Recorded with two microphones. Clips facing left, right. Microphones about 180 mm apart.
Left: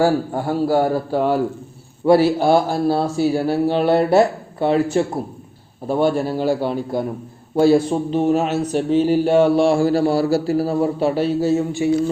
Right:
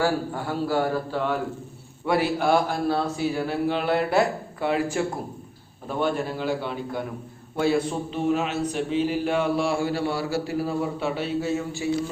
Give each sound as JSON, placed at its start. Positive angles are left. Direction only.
{"t": 0.0, "sound": "a man's voice", "side_deg": 40}
{"t": 11.8, "sound": "a man's voice", "side_deg": 25}